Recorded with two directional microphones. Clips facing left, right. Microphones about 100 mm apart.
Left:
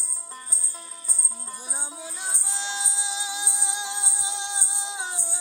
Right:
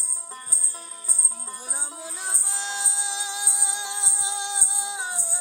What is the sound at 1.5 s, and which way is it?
Music, centre (ahead or behind).